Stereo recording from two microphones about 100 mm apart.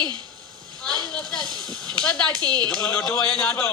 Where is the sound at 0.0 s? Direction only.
45° right (ahead or behind).